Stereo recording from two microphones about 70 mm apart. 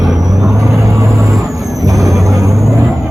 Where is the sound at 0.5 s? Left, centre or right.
Right.